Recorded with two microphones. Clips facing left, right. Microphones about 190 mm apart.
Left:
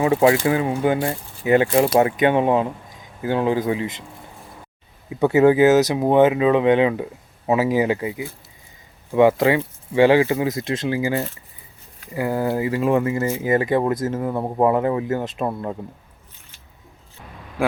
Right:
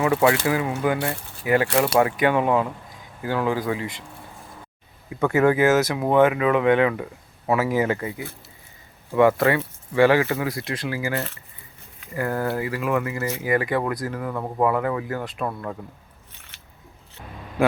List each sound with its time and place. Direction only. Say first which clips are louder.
0.0 s speech: left 3 dB; 25° left (ahead or behind)
5.0 s speech: left 4 dB; 20° left (ahead or behind)